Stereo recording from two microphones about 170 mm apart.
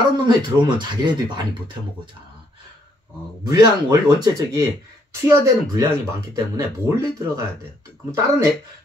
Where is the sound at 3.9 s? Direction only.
20° right (ahead or behind).